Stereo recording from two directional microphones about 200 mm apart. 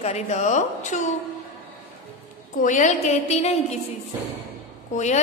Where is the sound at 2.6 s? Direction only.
40° left (ahead or behind).